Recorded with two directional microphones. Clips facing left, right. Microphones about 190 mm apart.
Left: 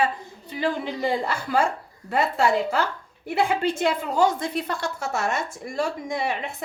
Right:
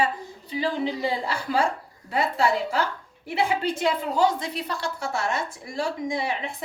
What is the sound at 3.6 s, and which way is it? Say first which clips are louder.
A woman's voice: left 1 dB; 50° left (ahead or behind).